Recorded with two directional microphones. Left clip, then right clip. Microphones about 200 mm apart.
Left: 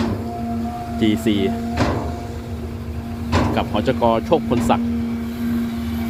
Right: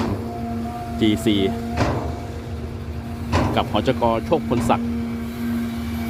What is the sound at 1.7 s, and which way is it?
Speech, 60° left (ahead or behind).